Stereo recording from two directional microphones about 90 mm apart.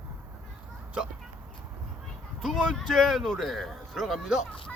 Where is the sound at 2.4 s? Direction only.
Centre (ahead or behind).